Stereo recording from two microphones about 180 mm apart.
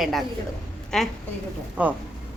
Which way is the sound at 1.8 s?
10° right (ahead or behind).